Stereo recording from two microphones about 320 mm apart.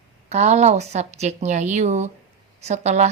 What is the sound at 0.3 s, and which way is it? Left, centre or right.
Speech, right.